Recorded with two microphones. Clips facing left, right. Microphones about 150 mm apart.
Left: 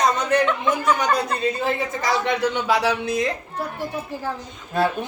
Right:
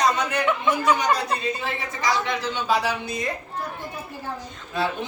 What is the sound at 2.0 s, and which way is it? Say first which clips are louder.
Speech: left 2 dB; 65° left (ahead or behind).